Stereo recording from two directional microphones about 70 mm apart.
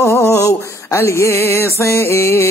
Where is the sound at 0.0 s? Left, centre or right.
Left.